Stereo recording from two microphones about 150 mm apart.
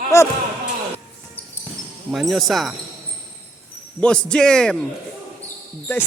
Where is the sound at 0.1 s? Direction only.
20° left (ahead or behind).